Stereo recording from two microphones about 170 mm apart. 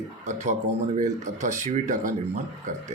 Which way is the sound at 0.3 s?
45° right (ahead or behind).